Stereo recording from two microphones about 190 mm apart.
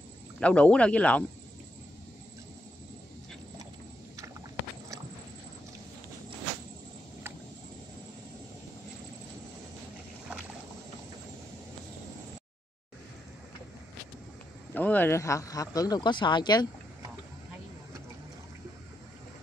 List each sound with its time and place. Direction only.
0.4 s speech: 5° left (ahead or behind)
14.7 s speech: 10° left (ahead or behind)